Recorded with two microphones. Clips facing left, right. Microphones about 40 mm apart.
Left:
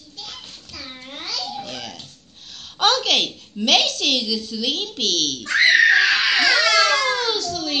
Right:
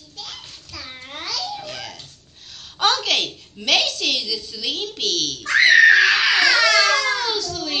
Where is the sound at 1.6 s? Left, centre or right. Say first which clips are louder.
Even; left.